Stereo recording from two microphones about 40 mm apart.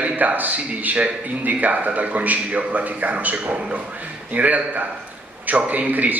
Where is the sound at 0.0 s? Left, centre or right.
Right.